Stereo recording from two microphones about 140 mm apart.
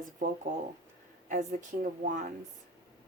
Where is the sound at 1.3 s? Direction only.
60° right (ahead or behind).